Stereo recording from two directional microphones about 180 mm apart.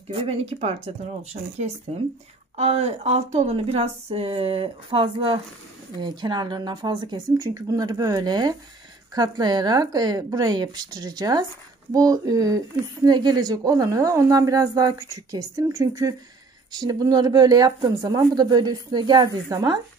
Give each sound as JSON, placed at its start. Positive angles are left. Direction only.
{"t": 0.1, "sound": "speech", "side_deg": -35}